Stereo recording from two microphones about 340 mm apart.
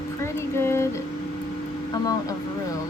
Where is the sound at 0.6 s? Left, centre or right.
Centre.